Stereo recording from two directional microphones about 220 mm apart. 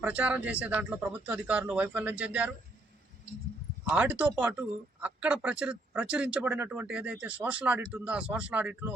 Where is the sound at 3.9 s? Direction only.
5° right (ahead or behind).